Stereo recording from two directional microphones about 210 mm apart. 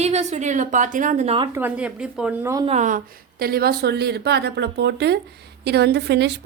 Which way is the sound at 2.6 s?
35° right (ahead or behind).